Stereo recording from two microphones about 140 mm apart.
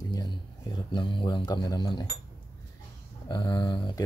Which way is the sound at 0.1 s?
30° left (ahead or behind).